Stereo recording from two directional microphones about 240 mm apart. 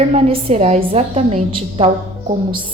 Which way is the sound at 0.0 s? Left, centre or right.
Right.